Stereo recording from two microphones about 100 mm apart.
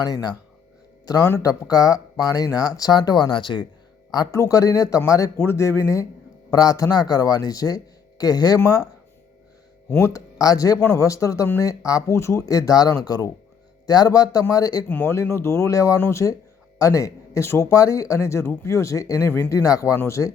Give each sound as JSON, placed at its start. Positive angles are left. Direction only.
{"t": 0.0, "sound": "speech", "side_deg": 40}
{"t": 4.1, "sound": "speech", "side_deg": 45}
{"t": 9.9, "sound": "speech", "side_deg": 30}
{"t": 10.8, "sound": "speech", "side_deg": 25}
{"t": 14.8, "sound": "speech", "side_deg": 20}